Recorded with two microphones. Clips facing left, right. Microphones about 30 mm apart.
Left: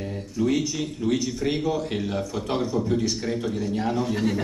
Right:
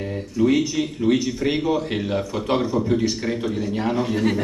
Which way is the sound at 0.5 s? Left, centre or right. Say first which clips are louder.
Right 4 dB; right.